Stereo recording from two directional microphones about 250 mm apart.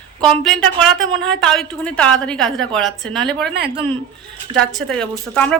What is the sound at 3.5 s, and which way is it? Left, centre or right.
Speech, right.